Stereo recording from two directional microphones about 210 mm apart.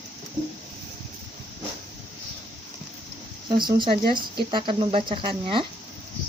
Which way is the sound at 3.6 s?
20° right (ahead or behind).